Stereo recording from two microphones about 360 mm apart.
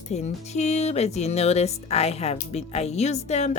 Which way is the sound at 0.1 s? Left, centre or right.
Centre.